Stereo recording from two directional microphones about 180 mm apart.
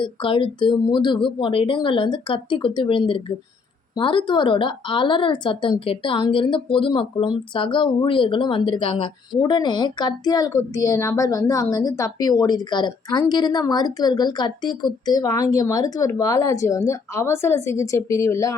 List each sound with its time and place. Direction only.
0.0 s a woman's voice: 30° left (ahead or behind)